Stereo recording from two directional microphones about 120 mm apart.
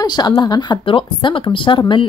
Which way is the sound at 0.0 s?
35° left (ahead or behind).